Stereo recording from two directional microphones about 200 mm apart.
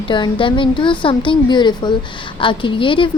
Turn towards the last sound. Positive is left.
turn(degrees=25)  # may be behind; listen again after turning